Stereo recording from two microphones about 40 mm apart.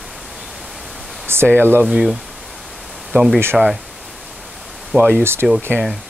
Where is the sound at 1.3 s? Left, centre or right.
Right.